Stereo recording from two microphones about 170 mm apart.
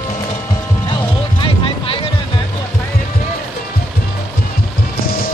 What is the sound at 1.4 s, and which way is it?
Music, 30° left (ahead or behind).